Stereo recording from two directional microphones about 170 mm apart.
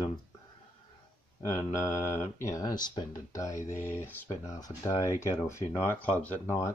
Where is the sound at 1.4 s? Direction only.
20° left (ahead or behind).